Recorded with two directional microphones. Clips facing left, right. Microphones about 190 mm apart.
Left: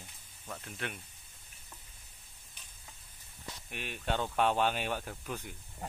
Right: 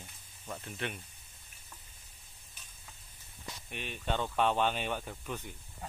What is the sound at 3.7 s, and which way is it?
Speech, 5° left (ahead or behind).